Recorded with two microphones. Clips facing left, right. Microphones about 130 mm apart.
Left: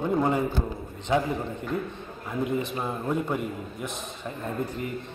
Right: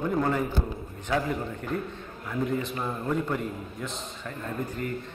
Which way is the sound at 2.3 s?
20° left (ahead or behind).